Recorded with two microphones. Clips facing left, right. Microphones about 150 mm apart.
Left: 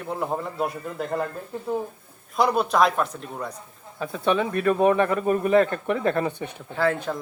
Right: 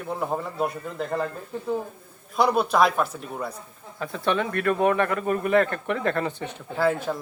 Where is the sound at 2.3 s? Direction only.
Centre (ahead or behind).